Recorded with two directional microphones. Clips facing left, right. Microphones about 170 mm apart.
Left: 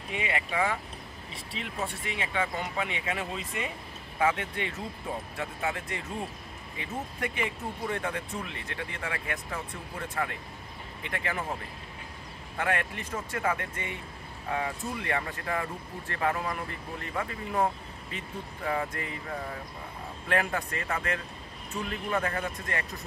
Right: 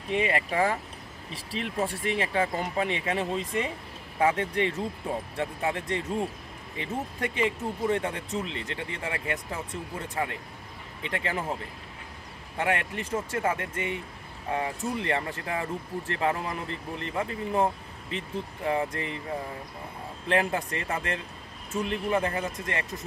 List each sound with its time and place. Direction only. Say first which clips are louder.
0.2 s speech: right 3 dB; 40° right (ahead or behind)
12.5 s speech: right 2 dB; 25° right (ahead or behind)
20.2 s speech: right 3 dB; 25° right (ahead or behind)